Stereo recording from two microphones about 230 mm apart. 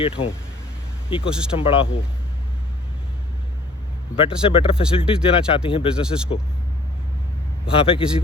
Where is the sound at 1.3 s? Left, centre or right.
Centre.